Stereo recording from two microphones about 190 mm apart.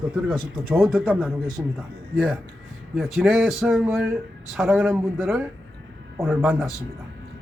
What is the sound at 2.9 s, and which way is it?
A man's voice, centre (ahead or behind).